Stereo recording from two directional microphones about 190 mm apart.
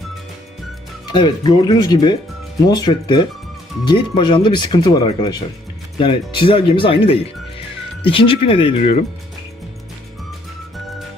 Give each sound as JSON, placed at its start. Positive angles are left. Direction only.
{"t": 1.0, "sound": "speech", "side_deg": 25}